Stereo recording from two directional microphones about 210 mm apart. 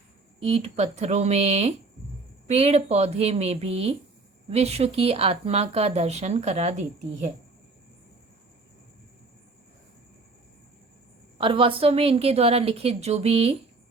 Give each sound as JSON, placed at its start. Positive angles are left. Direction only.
{"t": 0.4, "sound": "a woman's voice", "side_deg": -30}
{"t": 11.3, "sound": "a woman's voice", "side_deg": -25}